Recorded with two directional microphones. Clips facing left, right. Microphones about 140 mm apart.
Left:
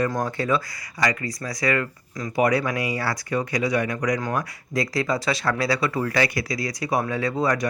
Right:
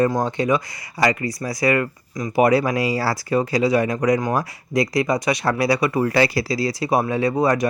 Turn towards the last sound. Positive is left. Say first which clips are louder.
# right 5 dB
turn(degrees=-25)  # may be behind; listen again after turning